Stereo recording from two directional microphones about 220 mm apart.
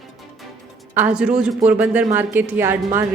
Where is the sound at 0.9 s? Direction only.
5° right (ahead or behind).